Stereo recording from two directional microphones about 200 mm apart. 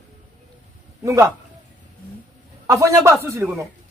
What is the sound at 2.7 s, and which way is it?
Speech, 15° right (ahead or behind).